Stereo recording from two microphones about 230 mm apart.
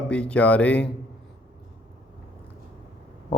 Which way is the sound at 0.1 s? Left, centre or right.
Centre.